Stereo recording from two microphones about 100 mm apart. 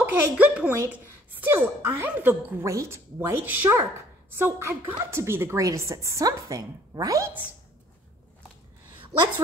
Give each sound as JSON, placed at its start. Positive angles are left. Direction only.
{"t": 0.0, "sound": "a woman's voice", "side_deg": -15}